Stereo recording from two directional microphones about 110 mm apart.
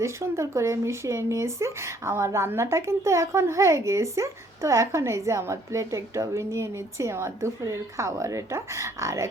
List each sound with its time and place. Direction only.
0.0 s speech: 25° right (ahead or behind)